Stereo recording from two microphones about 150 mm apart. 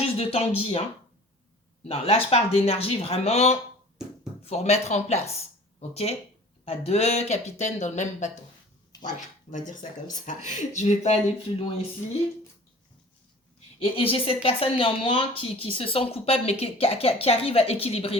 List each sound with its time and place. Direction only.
0.0 s speech: 40° left (ahead or behind)
1.8 s speech: 40° left (ahead or behind)
9.5 s speech: 55° left (ahead or behind); by 11.9 s 40° left (ahead or behind)
13.7 s speech: 40° left (ahead or behind)